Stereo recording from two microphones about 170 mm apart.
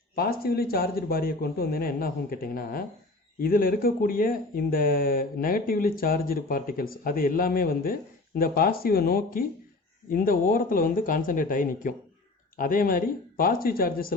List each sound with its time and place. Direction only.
0.2 s speech: 65° left (ahead or behind)